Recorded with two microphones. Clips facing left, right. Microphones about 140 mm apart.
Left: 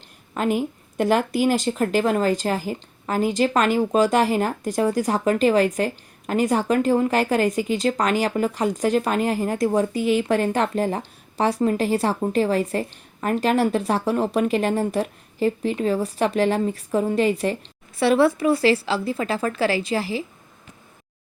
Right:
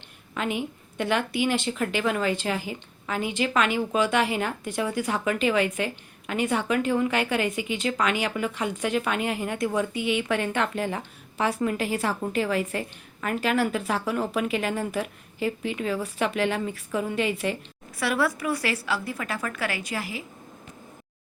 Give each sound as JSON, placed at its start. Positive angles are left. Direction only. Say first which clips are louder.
{"t": 0.3, "sound": "speech", "louder": "left 6 dB", "side_deg": 40}